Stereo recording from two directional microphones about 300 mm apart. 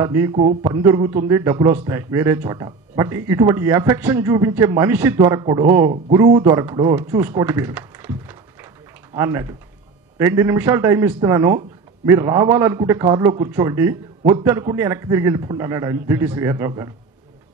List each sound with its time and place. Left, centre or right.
0.0 s a man's voice: centre
0.3 s speech: right
0.6 s a man's voice: centre